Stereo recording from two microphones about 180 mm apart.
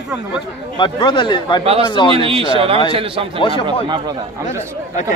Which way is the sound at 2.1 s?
30° right (ahead or behind).